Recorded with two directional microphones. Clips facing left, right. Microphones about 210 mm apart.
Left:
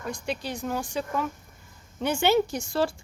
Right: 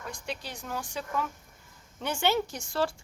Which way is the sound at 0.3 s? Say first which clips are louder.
Left 7 dB; 15° left (ahead or behind).